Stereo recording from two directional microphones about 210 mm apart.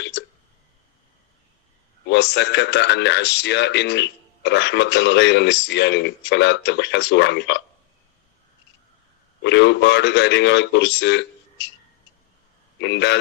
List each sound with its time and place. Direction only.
2.0 s a man's voice: 50° left (ahead or behind)
9.4 s a man's voice: 55° left (ahead or behind)
12.8 s a man's voice: 55° left (ahead or behind)